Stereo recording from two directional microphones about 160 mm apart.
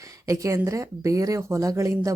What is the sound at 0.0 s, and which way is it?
Speech, 20° right (ahead or behind).